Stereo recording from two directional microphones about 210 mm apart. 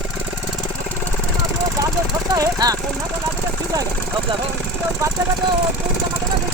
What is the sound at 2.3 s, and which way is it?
Speech, 15° right (ahead or behind).